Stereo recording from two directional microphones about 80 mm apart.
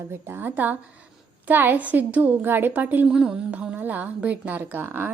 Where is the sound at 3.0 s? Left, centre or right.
Centre; by 5.1 s right.